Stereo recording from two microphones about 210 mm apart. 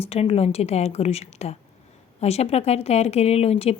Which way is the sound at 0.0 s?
30° left (ahead or behind).